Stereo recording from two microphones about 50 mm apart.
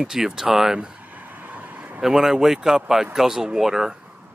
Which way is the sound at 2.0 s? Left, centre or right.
Centre.